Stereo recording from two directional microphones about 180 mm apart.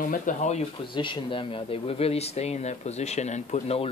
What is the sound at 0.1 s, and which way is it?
Speech, 45° left (ahead or behind).